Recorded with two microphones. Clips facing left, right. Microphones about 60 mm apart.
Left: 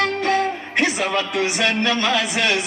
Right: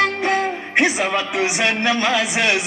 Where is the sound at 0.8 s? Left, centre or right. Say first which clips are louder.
Right 2 dB; centre.